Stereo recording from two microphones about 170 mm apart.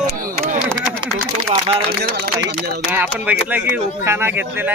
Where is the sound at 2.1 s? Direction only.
70° right (ahead or behind).